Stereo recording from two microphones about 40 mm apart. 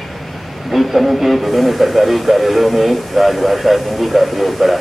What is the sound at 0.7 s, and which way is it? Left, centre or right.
Radio, centre.